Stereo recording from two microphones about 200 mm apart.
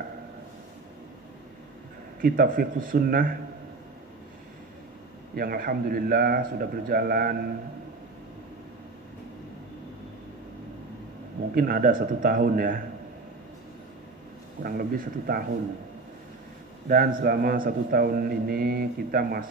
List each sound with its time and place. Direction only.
2.2 s a man's voice: 45° right (ahead or behind)
5.3 s a man's voice: 50° right (ahead or behind)
11.5 s a man's voice: 45° right (ahead or behind)
14.6 s a man's voice: 45° right (ahead or behind)
16.8 s a man's voice: 45° right (ahead or behind)